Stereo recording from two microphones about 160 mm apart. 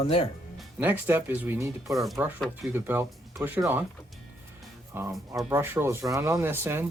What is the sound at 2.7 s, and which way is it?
Speech, 15° right (ahead or behind).